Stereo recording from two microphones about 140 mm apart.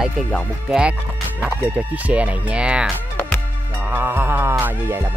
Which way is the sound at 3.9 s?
15° right (ahead or behind).